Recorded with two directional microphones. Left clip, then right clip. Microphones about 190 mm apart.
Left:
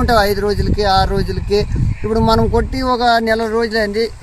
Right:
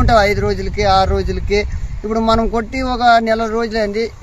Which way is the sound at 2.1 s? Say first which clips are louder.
Left 1 dB; 15° right (ahead or behind).